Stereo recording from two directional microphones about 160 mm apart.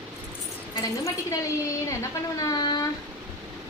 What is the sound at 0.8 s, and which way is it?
Speech, 20° left (ahead or behind).